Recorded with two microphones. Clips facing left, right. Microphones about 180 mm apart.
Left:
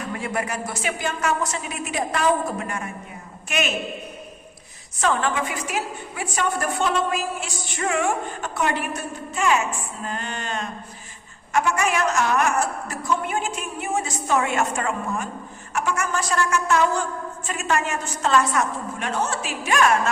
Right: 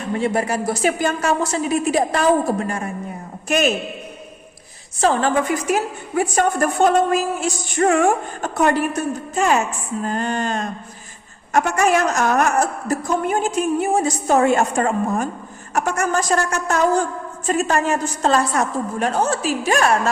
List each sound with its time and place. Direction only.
0.0 s a woman's voice: 30° right (ahead or behind)
4.9 s a woman's voice: 35° right (ahead or behind)